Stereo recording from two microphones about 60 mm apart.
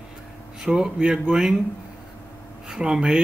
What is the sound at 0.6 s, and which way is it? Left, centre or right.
Speech, centre.